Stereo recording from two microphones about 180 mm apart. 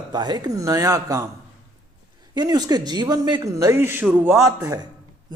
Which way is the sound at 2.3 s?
20° right (ahead or behind).